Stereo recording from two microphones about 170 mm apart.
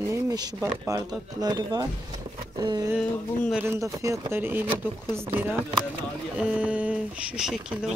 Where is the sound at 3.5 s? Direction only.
15° right (ahead or behind).